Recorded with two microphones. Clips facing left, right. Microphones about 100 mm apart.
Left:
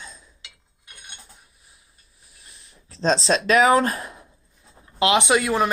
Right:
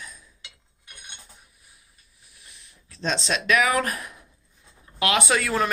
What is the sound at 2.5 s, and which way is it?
Speech, 35° left (ahead or behind).